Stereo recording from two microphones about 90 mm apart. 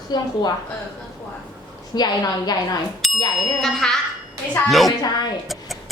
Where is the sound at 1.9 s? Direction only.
45° left (ahead or behind).